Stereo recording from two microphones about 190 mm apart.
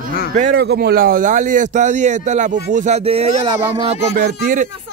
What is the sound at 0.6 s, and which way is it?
Speech, 55° right (ahead or behind).